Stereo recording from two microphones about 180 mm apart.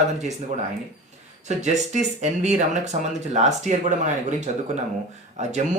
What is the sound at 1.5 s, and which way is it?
Speech, 40° right (ahead or behind).